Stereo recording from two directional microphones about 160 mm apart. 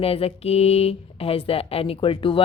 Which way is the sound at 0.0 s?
40° left (ahead or behind).